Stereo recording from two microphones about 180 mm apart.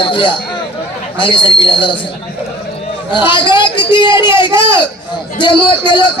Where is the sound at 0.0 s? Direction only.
30° left (ahead or behind).